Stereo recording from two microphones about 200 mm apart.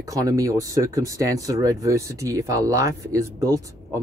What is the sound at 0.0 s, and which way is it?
Speech, 15° right (ahead or behind).